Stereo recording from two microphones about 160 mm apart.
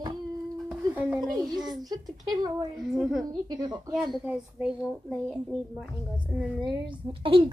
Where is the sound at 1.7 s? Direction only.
25° right (ahead or behind).